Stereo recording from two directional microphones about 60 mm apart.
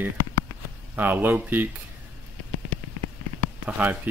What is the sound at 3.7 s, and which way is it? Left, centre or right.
Speech, right.